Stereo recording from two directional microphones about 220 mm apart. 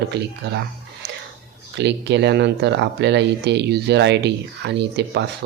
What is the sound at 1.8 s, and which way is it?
Speech, 50° right (ahead or behind).